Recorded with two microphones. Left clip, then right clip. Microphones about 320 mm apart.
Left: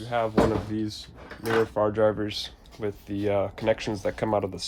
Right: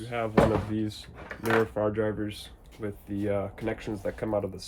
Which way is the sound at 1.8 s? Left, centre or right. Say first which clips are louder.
Left 5 dB; centre.